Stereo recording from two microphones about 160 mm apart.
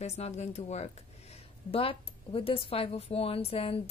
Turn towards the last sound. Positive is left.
turn(degrees=35)  # may be behind; listen again after turning